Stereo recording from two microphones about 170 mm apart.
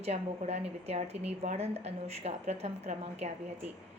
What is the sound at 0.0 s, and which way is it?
Speech, 40° right (ahead or behind).